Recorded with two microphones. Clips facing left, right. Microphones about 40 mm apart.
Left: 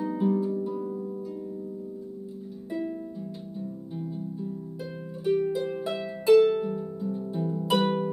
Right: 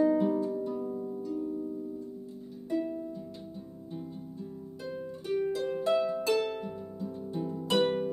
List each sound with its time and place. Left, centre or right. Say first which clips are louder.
0.0 s harp: right 1 dB; centre
2.9 s music: left 2 dB; centre
5.2 s harp: left 5 dB; centre